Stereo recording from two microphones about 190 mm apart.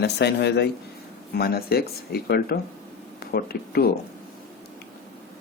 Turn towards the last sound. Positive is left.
turn(degrees=55)  # may be behind; listen again after turning